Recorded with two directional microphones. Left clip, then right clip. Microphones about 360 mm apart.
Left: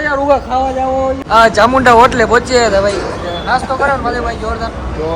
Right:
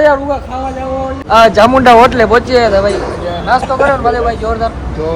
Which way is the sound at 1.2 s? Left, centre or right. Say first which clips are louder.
Right 3 dB; centre.